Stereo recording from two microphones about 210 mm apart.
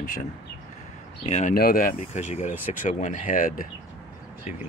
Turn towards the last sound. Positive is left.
turn(degrees=40)  # may be behind; listen again after turning